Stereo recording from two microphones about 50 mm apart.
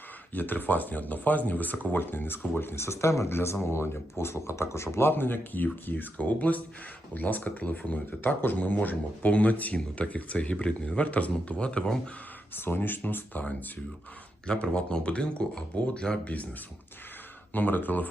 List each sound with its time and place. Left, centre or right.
0.3 s speech: left
2.8 s speech: left
3.2 s speech: left
12.5 s speech: left
14.4 s speech: centre
17.5 s speech: left